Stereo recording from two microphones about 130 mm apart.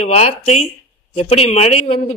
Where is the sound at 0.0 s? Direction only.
55° left (ahead or behind).